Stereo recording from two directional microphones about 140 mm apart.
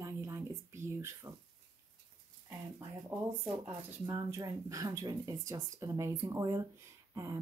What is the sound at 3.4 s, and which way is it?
Speech, 10° right (ahead or behind).